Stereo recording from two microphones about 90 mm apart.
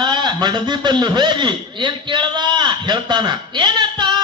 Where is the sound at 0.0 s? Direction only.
55° right (ahead or behind).